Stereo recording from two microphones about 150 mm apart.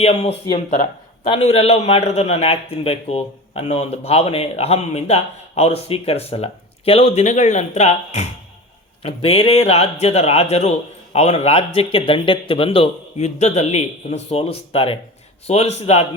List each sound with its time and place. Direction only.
0.0 s a man's voice: 45° left (ahead or behind)